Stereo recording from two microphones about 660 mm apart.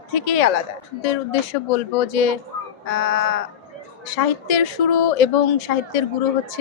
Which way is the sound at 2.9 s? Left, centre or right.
Left.